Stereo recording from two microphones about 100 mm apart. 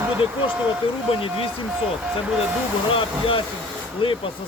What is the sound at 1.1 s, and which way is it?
Speech, 65° left (ahead or behind).